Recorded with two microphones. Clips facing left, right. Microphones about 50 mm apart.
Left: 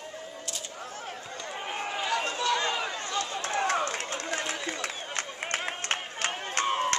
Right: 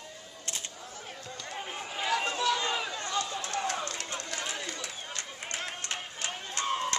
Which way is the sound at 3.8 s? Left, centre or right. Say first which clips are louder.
Left 5 dB; left.